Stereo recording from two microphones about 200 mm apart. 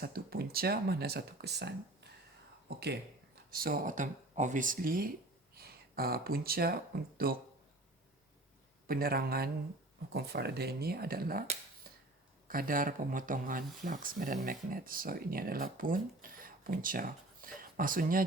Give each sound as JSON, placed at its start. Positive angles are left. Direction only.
{"t": 0.0, "sound": "speech", "side_deg": -50}
{"t": 8.9, "sound": "speech", "side_deg": -50}
{"t": 12.5, "sound": "speech", "side_deg": -45}